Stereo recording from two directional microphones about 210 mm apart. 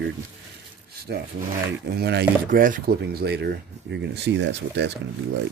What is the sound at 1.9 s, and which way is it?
Speech, 50° right (ahead or behind).